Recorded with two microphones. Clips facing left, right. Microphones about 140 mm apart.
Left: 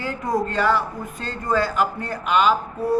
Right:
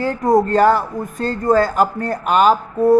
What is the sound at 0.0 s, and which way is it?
Speech, 45° right (ahead or behind).